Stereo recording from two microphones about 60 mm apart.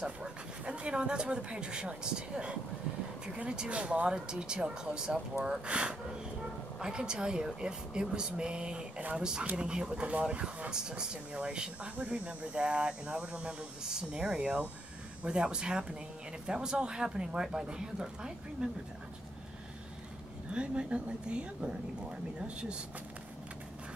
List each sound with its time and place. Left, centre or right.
0.2 s speech: centre
20.5 s speech: centre